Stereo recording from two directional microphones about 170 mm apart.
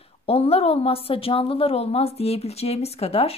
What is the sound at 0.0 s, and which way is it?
A woman's voice, 35° left (ahead or behind).